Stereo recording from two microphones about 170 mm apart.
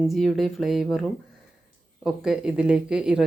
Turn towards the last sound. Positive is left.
turn(degrees=-5)  # may be behind; listen again after turning